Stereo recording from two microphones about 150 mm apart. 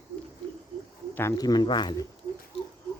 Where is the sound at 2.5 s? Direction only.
40° left (ahead or behind).